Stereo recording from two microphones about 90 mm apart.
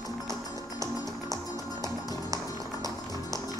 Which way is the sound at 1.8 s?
40° right (ahead or behind).